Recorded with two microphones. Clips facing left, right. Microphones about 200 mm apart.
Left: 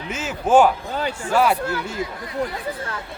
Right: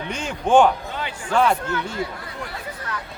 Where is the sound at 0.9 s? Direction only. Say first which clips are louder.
Left 5 dB; 40° left (ahead or behind).